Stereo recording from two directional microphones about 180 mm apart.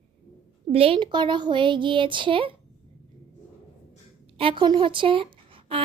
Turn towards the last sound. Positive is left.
turn(degrees=-30)  # may be behind; listen again after turning